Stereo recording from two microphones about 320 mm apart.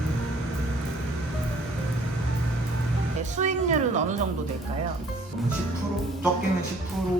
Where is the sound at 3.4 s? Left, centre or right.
Right.